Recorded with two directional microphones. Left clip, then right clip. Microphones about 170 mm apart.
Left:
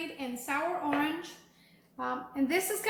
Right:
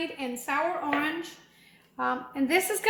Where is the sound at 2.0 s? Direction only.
50° right (ahead or behind).